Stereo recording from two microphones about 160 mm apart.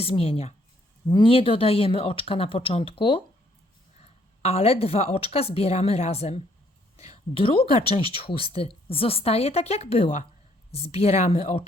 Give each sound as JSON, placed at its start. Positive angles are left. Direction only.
{"t": 0.0, "sound": "speech", "side_deg": 35}